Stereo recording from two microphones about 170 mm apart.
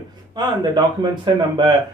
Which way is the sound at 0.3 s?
25° right (ahead or behind).